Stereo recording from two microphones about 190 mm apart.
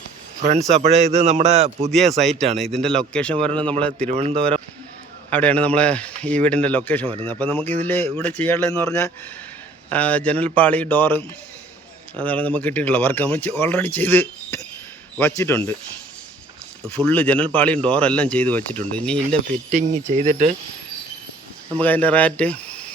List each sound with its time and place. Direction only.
0.7 s a man's voice: 35° right (ahead or behind)
1.9 s speech: centre (ahead or behind)
3.9 s a man's voice: 35° right (ahead or behind)
5.3 s speech: 5° left (ahead or behind)
16.9 s speech: 10° left (ahead or behind)
20.1 s a man's voice: 40° right (ahead or behind)
21.8 s speech: 10° left (ahead or behind)